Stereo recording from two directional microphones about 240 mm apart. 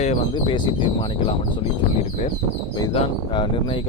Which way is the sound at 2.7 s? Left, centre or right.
Centre.